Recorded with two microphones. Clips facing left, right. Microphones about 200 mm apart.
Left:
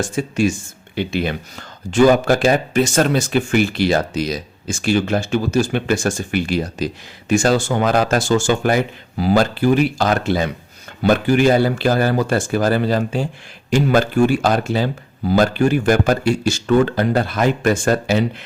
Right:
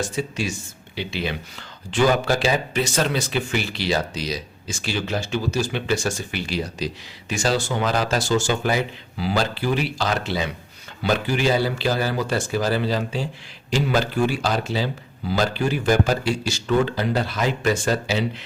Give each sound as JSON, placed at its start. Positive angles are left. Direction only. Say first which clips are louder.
{"t": 0.0, "sound": "speech", "louder": "left 7 dB", "side_deg": 50}